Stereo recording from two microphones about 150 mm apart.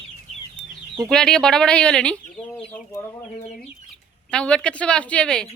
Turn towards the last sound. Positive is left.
turn(degrees=5)  # may be behind; listen again after turning